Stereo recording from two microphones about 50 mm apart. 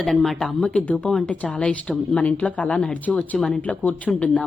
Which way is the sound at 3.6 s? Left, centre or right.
Left.